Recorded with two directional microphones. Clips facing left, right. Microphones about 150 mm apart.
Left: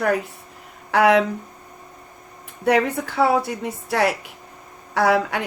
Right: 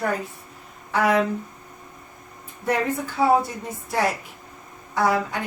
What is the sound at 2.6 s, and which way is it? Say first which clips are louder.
A woman's voice: left 5 dB; 70° left (ahead or behind).